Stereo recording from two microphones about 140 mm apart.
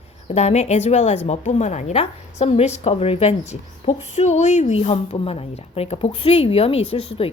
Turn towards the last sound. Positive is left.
turn(degrees=45)  # may be behind; listen again after turning